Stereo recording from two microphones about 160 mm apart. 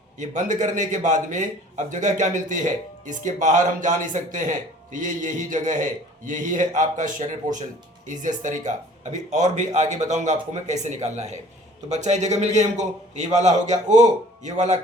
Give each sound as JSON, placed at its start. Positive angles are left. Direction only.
{"t": 0.2, "sound": "a man's voice", "side_deg": -50}